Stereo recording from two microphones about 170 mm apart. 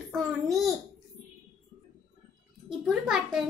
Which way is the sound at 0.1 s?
Centre (ahead or behind).